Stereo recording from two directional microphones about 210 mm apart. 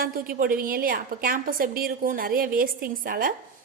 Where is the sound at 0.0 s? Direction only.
45° right (ahead or behind).